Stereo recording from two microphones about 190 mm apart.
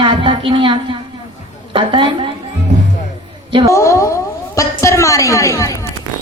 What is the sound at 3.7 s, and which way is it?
A woman's voice, 15° left (ahead or behind).